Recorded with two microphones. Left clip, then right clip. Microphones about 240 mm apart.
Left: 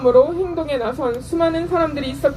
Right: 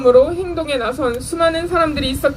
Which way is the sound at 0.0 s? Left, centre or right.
Right.